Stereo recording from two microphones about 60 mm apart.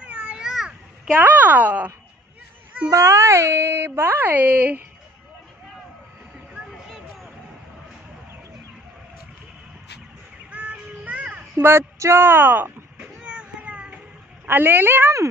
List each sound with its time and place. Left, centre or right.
0.0 s a sound: right
0.4 s a sound: centre
1.1 s speech: right
2.9 s speech: right
10.5 s child singing: right
11.5 s speech: right
13.2 s vehicle: centre
14.5 s speech: right